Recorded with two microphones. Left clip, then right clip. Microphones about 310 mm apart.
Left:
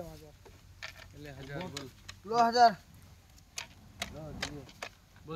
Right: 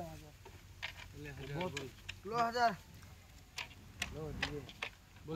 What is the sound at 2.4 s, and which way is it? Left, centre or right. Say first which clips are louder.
Speech: left 9 dB; left.